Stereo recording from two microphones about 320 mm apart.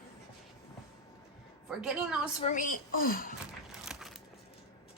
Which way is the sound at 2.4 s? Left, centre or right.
Left.